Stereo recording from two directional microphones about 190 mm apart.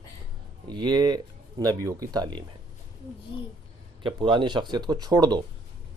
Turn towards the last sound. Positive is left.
turn(degrees=-20)  # may be behind; listen again after turning